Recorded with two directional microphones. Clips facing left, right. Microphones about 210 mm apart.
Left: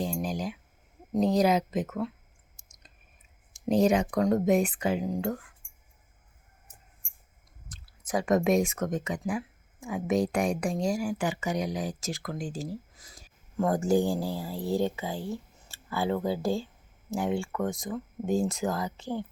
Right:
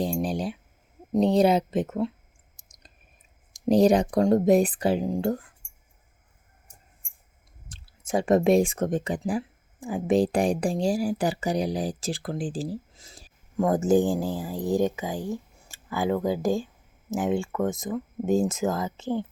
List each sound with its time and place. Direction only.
0.0 s a sound: 30° right (ahead or behind)
1.1 s speech: 30° right (ahead or behind)
2.6 s clicking: 35° right (ahead or behind)
3.5 s speech: 35° right (ahead or behind)
7.7 s speech: 25° right (ahead or behind)
13.6 s speech: 20° right (ahead or behind)